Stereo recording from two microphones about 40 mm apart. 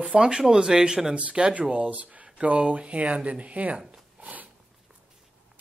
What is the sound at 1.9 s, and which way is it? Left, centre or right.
Speech, right.